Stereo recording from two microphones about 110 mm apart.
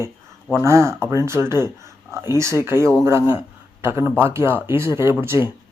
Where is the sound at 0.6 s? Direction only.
25° right (ahead or behind).